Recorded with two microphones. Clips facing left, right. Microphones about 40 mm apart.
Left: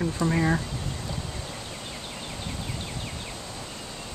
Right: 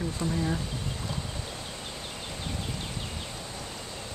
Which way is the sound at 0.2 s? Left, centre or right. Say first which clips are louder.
Left 6 dB; left.